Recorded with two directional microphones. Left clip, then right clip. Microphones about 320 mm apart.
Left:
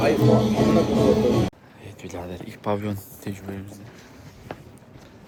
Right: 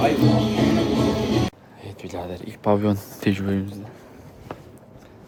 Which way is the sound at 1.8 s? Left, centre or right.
Centre.